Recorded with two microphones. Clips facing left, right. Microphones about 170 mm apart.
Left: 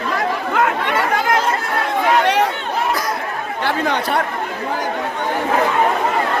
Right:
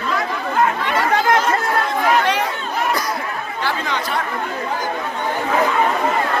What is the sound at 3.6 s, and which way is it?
Speech, 55° left (ahead or behind).